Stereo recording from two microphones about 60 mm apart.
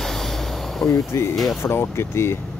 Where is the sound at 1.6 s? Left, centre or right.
Left.